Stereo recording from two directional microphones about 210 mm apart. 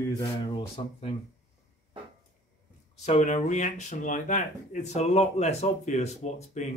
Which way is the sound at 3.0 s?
35° left (ahead or behind).